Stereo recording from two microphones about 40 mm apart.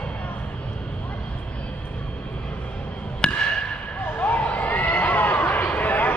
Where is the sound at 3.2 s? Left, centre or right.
Left.